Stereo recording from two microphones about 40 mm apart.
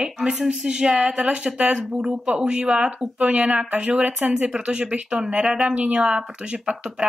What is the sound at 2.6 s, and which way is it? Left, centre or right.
Speech, centre.